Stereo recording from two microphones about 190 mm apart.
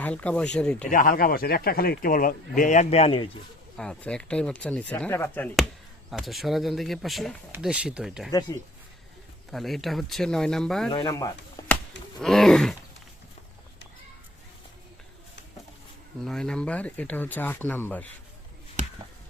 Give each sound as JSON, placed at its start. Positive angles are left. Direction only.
{"t": 0.0, "sound": "speech", "side_deg": 10}
{"t": 0.9, "sound": "speech", "side_deg": 45}
{"t": 3.8, "sound": "speech", "side_deg": 5}
{"t": 8.3, "sound": "speech", "side_deg": 20}
{"t": 9.5, "sound": "speech", "side_deg": 0}
{"t": 10.9, "sound": "speech", "side_deg": 20}
{"t": 12.2, "sound": "speech", "side_deg": 0}
{"t": 16.2, "sound": "speech", "side_deg": 5}
{"t": 18.8, "sound": "a sound", "side_deg": -40}